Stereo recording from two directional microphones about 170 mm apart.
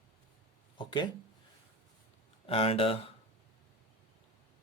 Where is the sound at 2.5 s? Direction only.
35° left (ahead or behind).